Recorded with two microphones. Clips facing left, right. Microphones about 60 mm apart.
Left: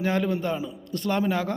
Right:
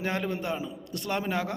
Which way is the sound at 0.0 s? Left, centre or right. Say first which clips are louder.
Left 5 dB; right.